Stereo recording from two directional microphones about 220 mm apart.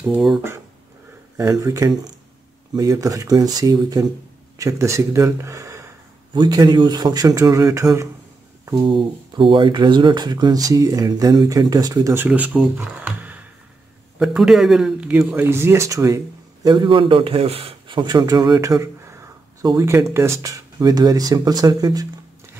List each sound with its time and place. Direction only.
0.1 s a man's voice: centre (ahead or behind)
1.3 s a man's voice: 15° right (ahead or behind)